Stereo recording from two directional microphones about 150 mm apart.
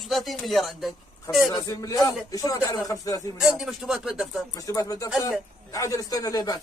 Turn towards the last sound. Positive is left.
turn(degrees=25)  # may be behind; listen again after turning